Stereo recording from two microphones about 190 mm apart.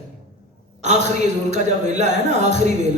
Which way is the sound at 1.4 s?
40° right (ahead or behind).